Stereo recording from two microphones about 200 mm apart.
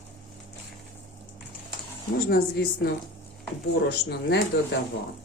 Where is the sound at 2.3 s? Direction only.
50° left (ahead or behind).